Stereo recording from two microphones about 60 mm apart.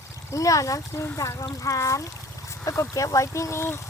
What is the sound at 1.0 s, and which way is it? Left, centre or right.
Speech, left.